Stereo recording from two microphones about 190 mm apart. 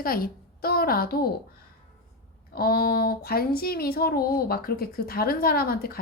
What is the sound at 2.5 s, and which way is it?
A woman's voice, 55° left (ahead or behind).